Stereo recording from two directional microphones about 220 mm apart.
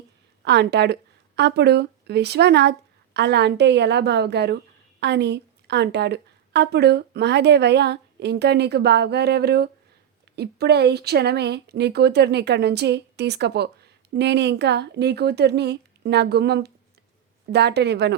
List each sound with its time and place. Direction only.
0.4 s speech: 50° right (ahead or behind)